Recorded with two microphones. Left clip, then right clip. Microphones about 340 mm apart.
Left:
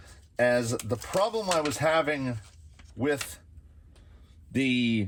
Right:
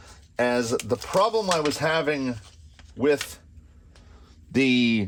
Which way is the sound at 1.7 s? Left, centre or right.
Centre.